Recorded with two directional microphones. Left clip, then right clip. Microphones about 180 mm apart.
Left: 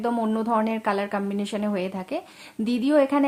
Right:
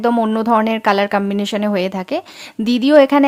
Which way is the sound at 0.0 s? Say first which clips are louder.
Right 9 dB; 35° right (ahead or behind).